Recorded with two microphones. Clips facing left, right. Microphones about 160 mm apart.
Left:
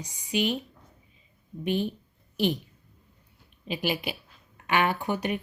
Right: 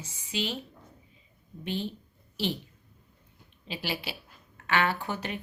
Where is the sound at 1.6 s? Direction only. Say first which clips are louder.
Left 6 dB; 15° left (ahead or behind).